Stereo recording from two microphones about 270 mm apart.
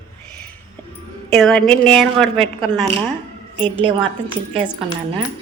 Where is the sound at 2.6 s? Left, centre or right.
Centre.